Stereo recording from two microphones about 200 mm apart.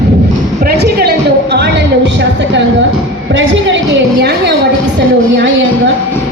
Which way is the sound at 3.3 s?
65° right (ahead or behind).